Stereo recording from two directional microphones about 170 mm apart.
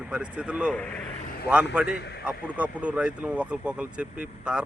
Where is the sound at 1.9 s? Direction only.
75° left (ahead or behind).